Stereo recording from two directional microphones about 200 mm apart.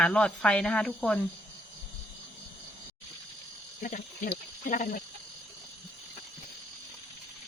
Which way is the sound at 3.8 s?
40° left (ahead or behind).